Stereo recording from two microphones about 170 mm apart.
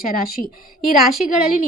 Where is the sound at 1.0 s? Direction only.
Centre (ahead or behind).